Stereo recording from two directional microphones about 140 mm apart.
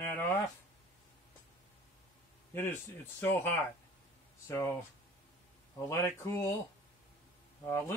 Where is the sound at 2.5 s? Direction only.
15° left (ahead or behind).